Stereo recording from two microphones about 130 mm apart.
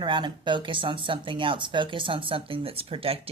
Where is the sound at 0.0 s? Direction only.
40° right (ahead or behind).